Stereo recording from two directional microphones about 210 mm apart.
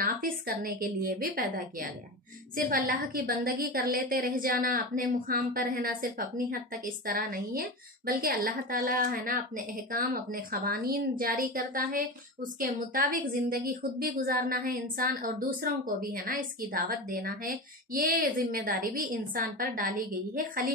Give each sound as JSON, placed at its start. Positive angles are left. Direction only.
{"t": 0.0, "sound": "a woman's voice", "side_deg": -45}